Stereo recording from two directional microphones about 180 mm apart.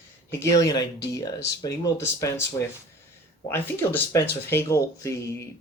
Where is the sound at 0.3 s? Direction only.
15° left (ahead or behind).